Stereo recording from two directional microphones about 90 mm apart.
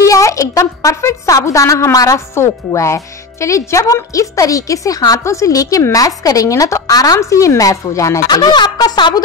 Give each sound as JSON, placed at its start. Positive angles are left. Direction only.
{"t": 0.0, "sound": "a woman's voice", "side_deg": 35}
{"t": 8.6, "sound": "speech", "side_deg": 50}